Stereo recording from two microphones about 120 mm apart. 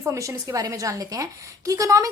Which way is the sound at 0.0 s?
25° right (ahead or behind).